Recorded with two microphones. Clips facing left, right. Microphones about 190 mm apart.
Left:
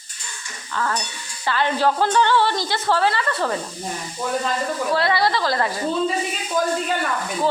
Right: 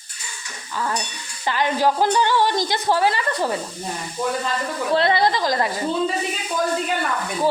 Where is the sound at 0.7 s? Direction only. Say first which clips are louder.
Left 1 dB; 15° right (ahead or behind).